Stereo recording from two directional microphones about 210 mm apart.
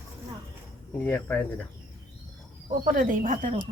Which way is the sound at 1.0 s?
10° left (ahead or behind).